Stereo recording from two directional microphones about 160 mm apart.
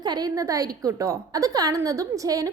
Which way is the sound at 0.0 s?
25° right (ahead or behind).